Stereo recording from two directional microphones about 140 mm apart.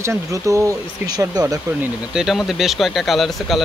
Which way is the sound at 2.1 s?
5° right (ahead or behind).